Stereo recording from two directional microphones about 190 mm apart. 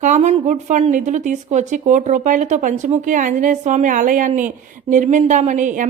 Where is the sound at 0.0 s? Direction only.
40° right (ahead or behind).